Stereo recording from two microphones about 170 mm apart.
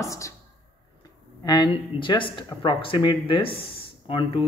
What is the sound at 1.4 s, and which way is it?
Speech, 25° left (ahead or behind).